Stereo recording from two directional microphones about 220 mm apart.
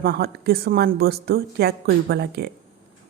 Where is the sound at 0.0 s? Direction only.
45° right (ahead or behind).